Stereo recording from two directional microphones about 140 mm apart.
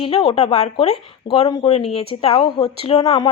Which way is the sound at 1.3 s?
35° left (ahead or behind).